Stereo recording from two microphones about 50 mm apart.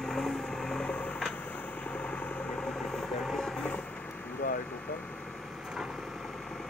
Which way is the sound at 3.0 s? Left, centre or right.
Centre.